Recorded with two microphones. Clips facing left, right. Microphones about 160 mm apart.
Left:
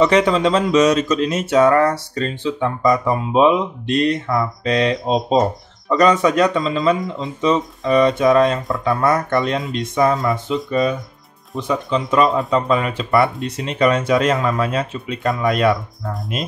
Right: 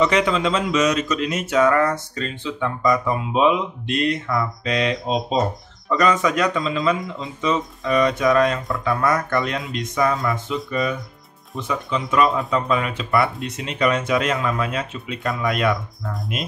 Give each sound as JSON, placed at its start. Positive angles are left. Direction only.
{"t": 0.0, "sound": "speech", "side_deg": 30}